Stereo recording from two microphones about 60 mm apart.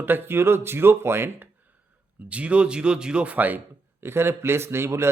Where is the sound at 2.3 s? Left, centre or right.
Right.